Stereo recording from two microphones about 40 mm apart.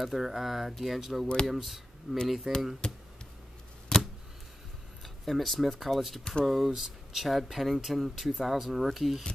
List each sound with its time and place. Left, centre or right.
0.0 s speech: centre
2.1 s speech: centre
2.8 s speech: left
3.9 s a sound: centre
5.0 s speech: centre